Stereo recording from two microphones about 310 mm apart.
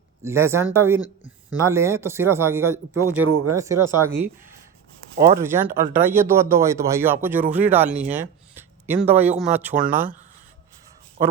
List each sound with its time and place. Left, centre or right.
0.2 s speech: centre
3.2 s speech: right
3.5 s a man's voice: centre